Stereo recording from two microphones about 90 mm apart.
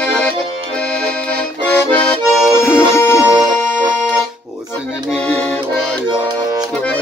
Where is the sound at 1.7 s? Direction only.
20° left (ahead or behind).